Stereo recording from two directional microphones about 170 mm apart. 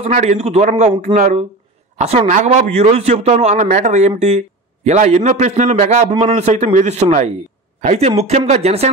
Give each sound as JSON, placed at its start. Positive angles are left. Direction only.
{"t": 0.0, "sound": "a man's voice", "side_deg": -45}